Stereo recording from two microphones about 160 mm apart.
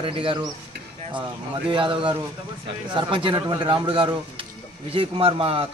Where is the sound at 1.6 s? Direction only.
30° right (ahead or behind).